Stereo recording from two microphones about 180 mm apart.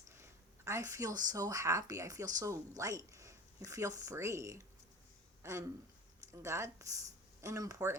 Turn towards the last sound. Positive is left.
turn(degrees=-15)  # may be behind; listen again after turning